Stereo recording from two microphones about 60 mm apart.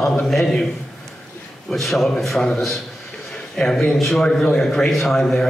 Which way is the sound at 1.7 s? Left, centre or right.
Centre.